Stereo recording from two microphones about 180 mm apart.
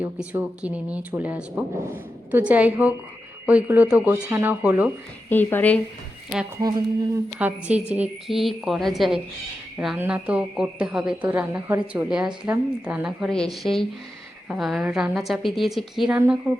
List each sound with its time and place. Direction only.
0.0 s speech: 10° right (ahead or behind)
5.3 s speech: 10° left (ahead or behind)
6.6 s a sound: 20° right (ahead or behind)
7.3 s speech: 5° right (ahead or behind)